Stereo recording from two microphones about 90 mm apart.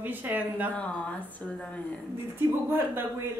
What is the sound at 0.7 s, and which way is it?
Speech, 15° left (ahead or behind).